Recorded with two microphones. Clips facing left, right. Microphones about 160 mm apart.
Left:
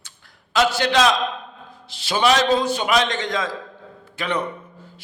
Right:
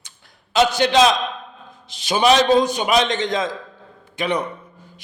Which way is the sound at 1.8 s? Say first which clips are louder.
Right 3 dB; 20° right (ahead or behind).